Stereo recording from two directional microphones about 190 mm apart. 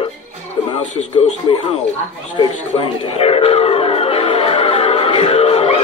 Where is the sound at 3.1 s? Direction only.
30° left (ahead or behind).